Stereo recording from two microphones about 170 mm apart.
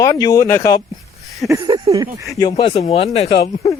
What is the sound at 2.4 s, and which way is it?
Speech, 30° left (ahead or behind).